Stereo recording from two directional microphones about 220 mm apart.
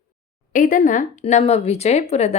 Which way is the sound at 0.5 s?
35° left (ahead or behind).